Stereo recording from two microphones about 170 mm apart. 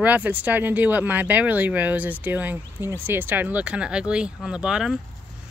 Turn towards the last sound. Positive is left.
turn(degrees=-5)  # may be behind; listen again after turning